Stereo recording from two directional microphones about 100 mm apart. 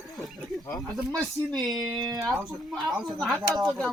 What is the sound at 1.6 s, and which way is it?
Speech, 40° right (ahead or behind).